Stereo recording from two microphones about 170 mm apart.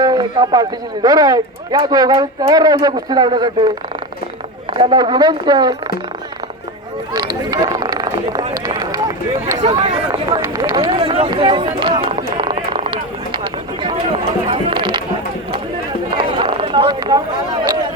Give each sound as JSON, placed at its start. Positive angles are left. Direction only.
{"t": 0.0, "sound": "speech", "side_deg": -25}
{"t": 4.8, "sound": "speech", "side_deg": -30}
{"t": 7.1, "sound": "a sound", "side_deg": -25}
{"t": 8.6, "sound": "speech", "side_deg": -20}
{"t": 14.4, "sound": "music", "side_deg": -30}
{"t": 16.0, "sound": "a sound", "side_deg": -30}